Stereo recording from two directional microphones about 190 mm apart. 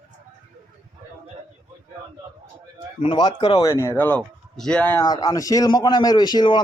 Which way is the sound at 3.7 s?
15° left (ahead or behind).